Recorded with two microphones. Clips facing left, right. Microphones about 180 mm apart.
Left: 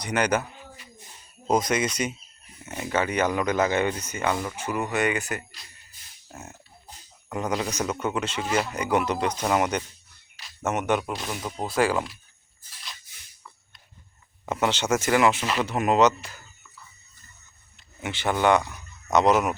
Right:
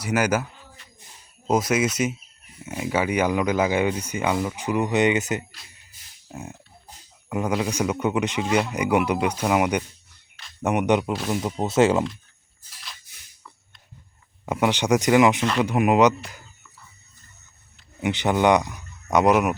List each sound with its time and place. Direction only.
0.0 s speech: 5° right (ahead or behind)
1.5 s speech: 5° right (ahead or behind); by 12.0 s 20° right (ahead or behind)
14.4 s speech: 10° right (ahead or behind)
18.0 s speech: 20° right (ahead or behind)